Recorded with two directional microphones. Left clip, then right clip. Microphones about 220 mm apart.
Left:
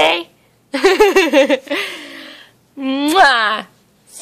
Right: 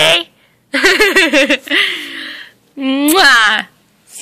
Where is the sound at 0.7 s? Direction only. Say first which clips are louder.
Right 1 dB; 10° left (ahead or behind).